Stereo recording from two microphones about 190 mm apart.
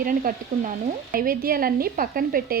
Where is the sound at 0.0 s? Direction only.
45° right (ahead or behind).